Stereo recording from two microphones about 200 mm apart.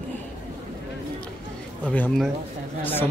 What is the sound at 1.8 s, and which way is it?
Speech, 5° left (ahead or behind).